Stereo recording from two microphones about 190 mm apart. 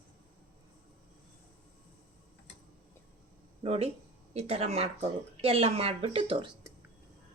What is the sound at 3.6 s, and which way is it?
A woman's voice, 30° right (ahead or behind).